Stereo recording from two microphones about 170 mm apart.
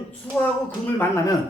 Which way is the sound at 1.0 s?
15° left (ahead or behind).